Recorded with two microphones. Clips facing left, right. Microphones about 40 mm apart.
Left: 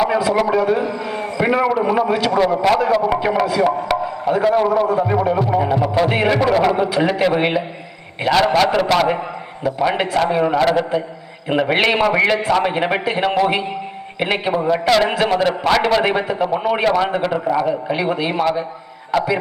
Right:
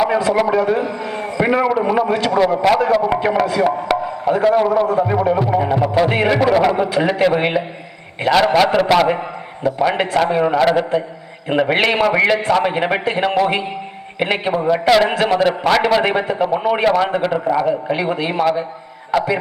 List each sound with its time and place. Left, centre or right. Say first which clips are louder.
0.0 s speech: right 1 dB; centre